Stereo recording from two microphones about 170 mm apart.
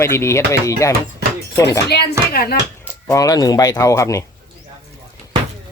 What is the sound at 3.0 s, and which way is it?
Speech, 20° left (ahead or behind).